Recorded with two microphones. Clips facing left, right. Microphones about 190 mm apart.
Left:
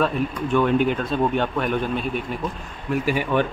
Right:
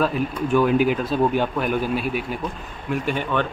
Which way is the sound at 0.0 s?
5° right (ahead or behind).